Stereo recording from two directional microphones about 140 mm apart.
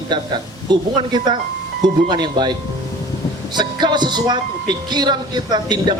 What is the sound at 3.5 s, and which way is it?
A man's voice, 30° right (ahead or behind).